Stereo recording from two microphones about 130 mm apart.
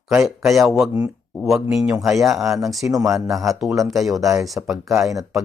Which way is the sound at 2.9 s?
25° right (ahead or behind).